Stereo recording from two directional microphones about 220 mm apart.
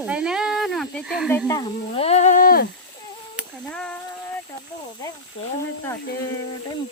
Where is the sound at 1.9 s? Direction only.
30° left (ahead or behind).